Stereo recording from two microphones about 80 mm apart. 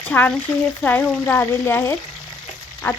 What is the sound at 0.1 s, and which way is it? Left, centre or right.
Speech, centre.